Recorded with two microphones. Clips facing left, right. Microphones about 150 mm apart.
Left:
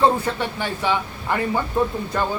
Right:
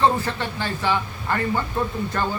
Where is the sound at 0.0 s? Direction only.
10° left (ahead or behind).